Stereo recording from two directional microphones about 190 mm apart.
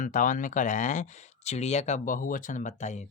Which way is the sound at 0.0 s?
40° left (ahead or behind).